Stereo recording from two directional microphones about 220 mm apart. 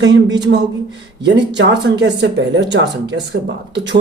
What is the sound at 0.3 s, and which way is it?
Speech, 50° right (ahead or behind).